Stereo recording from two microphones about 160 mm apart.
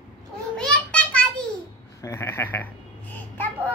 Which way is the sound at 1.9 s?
15° left (ahead or behind).